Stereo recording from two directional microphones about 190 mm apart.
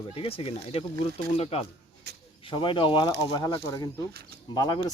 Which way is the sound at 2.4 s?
25° left (ahead or behind).